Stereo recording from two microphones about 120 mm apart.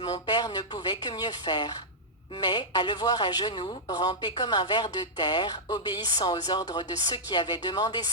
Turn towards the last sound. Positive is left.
turn(degrees=35)  # may be behind; listen again after turning